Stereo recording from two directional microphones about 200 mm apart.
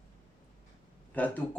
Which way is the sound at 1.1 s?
10° left (ahead or behind).